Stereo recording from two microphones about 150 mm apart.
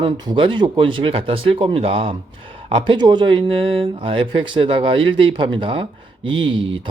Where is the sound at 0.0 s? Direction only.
35° right (ahead or behind).